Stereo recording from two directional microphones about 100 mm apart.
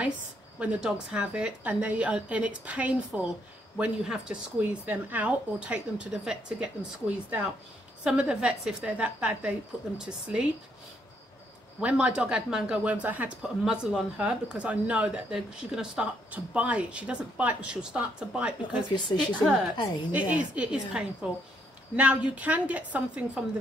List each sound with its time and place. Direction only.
0.6 s speech: 10° right (ahead or behind)
11.8 s speech: 10° right (ahead or behind)
18.9 s a woman's voice: 50° left (ahead or behind)
20.1 s speech: 15° right (ahead or behind)